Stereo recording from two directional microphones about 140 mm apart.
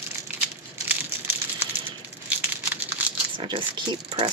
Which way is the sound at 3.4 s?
40° right (ahead or behind).